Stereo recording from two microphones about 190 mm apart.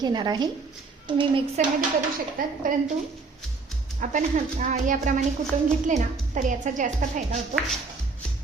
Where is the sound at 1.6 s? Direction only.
35° right (ahead or behind).